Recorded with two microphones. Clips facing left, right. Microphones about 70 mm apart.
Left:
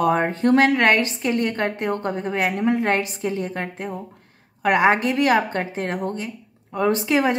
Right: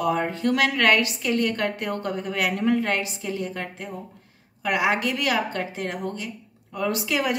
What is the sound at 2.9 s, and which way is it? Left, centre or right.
A woman's voice, left.